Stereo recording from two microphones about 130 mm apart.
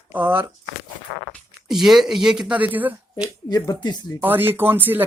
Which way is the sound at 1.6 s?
Centre (ahead or behind).